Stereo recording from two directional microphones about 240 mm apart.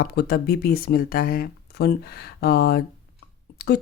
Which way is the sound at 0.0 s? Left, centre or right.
Left.